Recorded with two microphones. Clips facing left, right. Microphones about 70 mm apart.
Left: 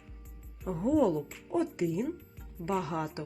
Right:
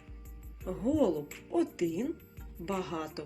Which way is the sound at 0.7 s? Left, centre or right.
Left.